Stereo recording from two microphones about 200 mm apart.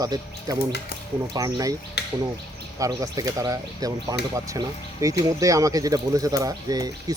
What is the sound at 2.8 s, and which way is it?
Speech, 20° right (ahead or behind).